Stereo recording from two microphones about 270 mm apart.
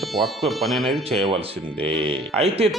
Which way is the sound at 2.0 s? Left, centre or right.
Right.